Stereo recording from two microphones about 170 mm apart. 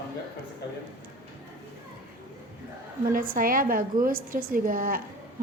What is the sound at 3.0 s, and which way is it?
A woman's voice, 55° right (ahead or behind).